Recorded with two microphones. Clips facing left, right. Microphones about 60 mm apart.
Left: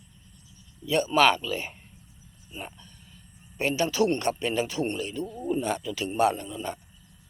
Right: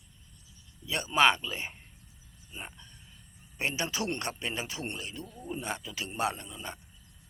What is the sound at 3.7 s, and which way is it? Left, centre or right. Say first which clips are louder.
A man's voice: left 13 dB; centre.